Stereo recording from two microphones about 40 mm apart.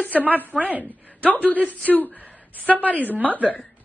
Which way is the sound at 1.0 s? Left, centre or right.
Left.